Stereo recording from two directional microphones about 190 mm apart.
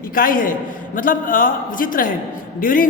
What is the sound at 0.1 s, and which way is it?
A man's voice, 50° left (ahead or behind).